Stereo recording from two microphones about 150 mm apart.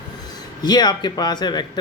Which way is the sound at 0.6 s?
25° left (ahead or behind).